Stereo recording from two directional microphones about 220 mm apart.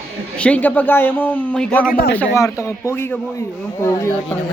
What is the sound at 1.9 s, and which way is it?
Speech, 40° left (ahead or behind).